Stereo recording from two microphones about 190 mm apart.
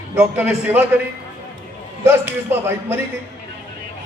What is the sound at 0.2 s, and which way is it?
Speech, 5° right (ahead or behind).